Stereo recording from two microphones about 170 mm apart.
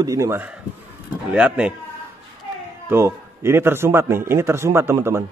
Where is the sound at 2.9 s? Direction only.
15° right (ahead or behind).